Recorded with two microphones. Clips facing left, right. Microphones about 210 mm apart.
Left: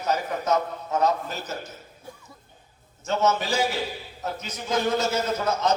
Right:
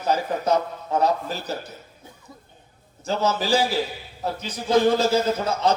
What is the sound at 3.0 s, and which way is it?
A man's voice, 35° right (ahead or behind).